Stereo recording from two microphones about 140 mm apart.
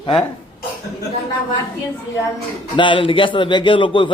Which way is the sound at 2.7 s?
35° left (ahead or behind).